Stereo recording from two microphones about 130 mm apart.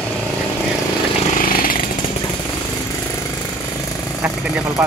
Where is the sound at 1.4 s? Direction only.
90° left.